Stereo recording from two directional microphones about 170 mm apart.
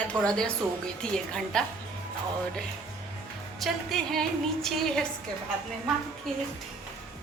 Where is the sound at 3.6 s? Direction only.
Centre (ahead or behind).